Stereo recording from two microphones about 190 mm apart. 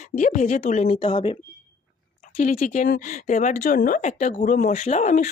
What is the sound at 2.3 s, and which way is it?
Speech, 45° left (ahead or behind).